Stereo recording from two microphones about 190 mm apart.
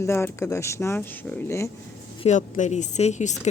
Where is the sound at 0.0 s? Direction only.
15° left (ahead or behind).